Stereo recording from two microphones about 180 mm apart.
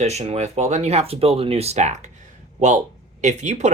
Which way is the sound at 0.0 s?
35° right (ahead or behind).